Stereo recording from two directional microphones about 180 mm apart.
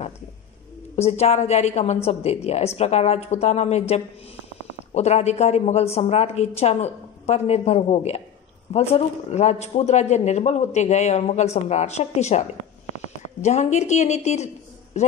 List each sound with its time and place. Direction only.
0.9 s a man's voice: 35° left (ahead or behind)